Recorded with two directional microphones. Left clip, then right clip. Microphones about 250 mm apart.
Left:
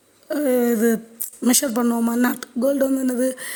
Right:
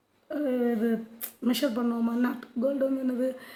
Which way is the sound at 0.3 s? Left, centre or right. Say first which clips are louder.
Left 9 dB; left.